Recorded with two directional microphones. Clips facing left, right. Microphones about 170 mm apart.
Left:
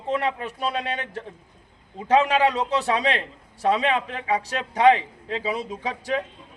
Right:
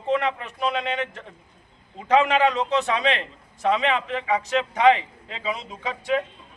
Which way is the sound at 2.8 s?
35° left (ahead or behind).